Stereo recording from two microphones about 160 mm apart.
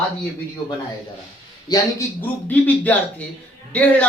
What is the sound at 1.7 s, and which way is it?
Speech, 25° left (ahead or behind).